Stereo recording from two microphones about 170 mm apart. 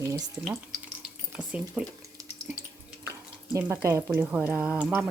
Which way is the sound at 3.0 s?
15° right (ahead or behind).